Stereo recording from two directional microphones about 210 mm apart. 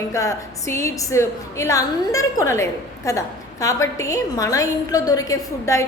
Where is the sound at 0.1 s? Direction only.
15° left (ahead or behind).